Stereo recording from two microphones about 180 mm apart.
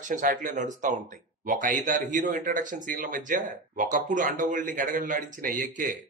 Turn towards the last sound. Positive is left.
turn(degrees=-50)  # may be behind; listen again after turning